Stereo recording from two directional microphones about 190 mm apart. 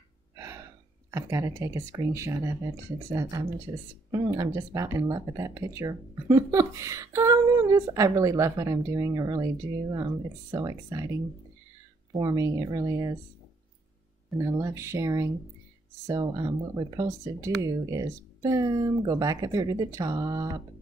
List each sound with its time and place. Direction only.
0.4 s gasp: 15° right (ahead or behind)
1.1 s speech: 15° right (ahead or behind)
10.5 s speech: 20° right (ahead or behind)
14.4 s speech: 15° right (ahead or behind)